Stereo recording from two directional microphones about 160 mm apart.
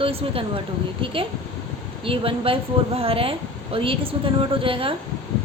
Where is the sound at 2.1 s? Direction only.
35° right (ahead or behind).